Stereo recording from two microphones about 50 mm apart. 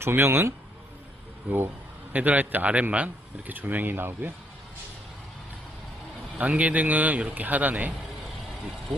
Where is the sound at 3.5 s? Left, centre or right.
Right.